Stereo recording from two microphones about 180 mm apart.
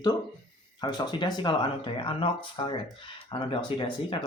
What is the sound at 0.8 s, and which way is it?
Speech, 25° left (ahead or behind).